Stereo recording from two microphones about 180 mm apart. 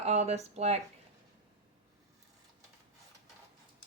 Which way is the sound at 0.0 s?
35° right (ahead or behind).